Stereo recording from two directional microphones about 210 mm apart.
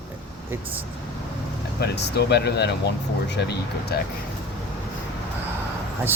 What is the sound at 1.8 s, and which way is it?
Speech, 55° left (ahead or behind).